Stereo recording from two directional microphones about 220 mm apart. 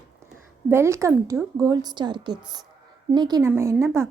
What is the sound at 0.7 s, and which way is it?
A woman's voice, 10° right (ahead or behind).